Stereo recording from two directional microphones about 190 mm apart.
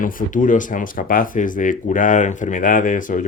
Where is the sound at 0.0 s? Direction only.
45° left (ahead or behind).